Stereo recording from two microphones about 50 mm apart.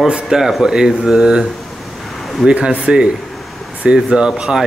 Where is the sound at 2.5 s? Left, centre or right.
Right.